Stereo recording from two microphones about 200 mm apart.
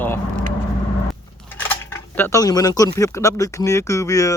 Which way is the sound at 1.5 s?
10° left (ahead or behind).